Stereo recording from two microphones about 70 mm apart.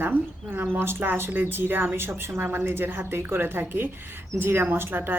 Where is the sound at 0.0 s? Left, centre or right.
Right.